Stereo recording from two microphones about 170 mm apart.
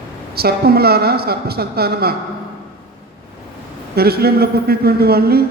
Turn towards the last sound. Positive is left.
turn(degrees=-65)  # may be behind; listen again after turning